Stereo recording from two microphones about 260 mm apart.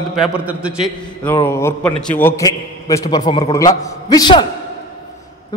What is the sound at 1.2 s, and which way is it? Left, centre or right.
A man's voice, centre.